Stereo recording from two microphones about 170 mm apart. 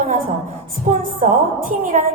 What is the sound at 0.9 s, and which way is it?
A woman's voice, 45° right (ahead or behind).